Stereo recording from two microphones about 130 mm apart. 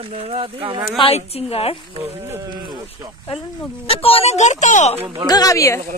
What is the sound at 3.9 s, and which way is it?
Speech, 45° left (ahead or behind).